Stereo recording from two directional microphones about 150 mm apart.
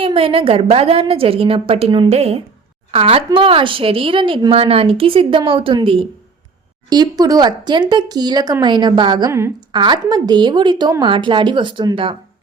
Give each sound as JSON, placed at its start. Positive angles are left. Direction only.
{"t": 0.0, "sound": "a woman's voice", "side_deg": -35}
{"t": 6.9, "sound": "a woman's voice", "side_deg": -25}
{"t": 9.3, "sound": "a woman's voice", "side_deg": -20}
{"t": 9.7, "sound": "a woman's voice", "side_deg": -30}